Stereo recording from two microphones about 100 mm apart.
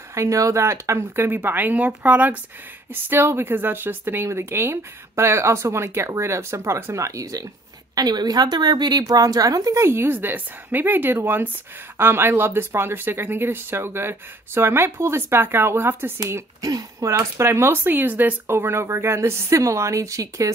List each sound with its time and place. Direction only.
0.1 s a woman's voice: 30° right (ahead or behind)